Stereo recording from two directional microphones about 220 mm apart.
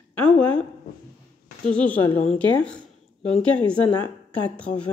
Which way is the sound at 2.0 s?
25° left (ahead or behind).